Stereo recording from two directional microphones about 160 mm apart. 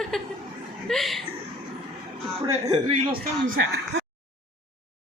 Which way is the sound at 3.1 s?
90° right.